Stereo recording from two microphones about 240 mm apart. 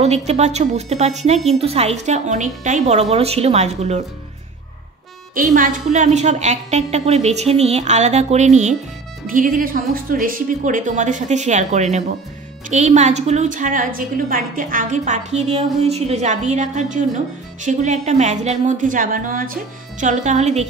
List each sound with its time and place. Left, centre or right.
0.0 s a woman's voice: right
5.3 s a woman's voice: right